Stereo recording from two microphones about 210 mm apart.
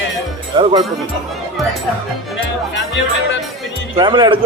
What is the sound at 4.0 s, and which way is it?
Speech, 20° right (ahead or behind).